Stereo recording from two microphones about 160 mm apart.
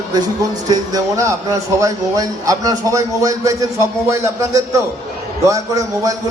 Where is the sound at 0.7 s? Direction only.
20° right (ahead or behind).